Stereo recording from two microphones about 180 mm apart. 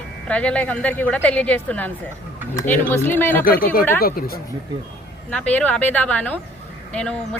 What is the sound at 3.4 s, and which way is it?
Speech, 50° left (ahead or behind).